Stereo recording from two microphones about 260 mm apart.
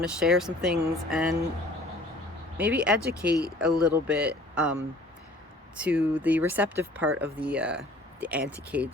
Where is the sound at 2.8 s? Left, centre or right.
Centre.